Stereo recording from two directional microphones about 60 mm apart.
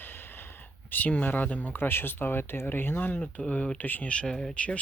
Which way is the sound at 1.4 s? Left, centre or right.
Left.